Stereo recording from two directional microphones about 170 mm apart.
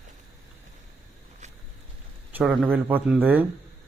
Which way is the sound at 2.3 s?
10° right (ahead or behind).